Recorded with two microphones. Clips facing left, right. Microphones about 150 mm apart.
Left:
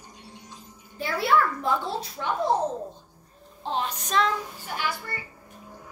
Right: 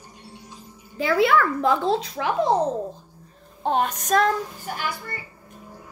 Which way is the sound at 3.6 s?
50° right (ahead or behind).